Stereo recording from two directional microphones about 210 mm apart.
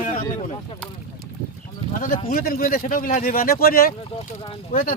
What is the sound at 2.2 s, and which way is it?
Speech, 45° left (ahead or behind).